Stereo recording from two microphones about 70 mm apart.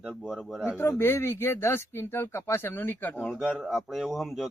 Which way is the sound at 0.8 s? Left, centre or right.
Left.